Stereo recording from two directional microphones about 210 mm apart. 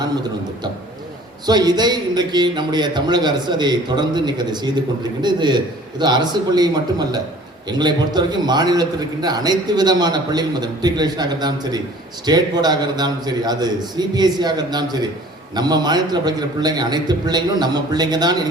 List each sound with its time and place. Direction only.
0.0 s a man's voice: 20° right (ahead or behind)